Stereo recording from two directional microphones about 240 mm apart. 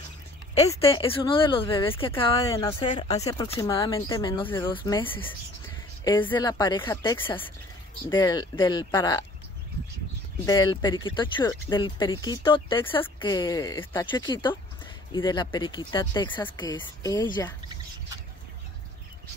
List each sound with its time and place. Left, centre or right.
0.7 s speech: left
6.3 s speech: centre
10.4 s speech: centre